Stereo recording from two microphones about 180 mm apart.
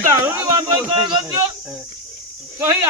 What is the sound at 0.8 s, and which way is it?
Speech, 25° right (ahead or behind).